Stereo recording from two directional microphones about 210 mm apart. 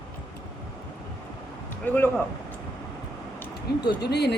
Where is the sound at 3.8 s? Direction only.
50° left (ahead or behind).